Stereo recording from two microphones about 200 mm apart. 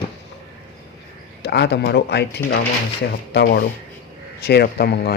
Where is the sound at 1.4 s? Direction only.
55° left (ahead or behind).